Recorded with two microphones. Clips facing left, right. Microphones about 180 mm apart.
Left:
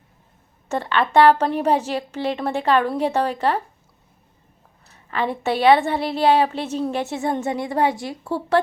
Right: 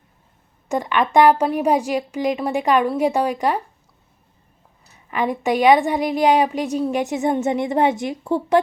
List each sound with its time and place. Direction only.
0.7 s a woman's voice: 15° right (ahead or behind)
5.1 s a woman's voice: 15° right (ahead or behind)